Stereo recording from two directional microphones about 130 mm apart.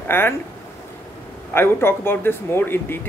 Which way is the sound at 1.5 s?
15° left (ahead or behind).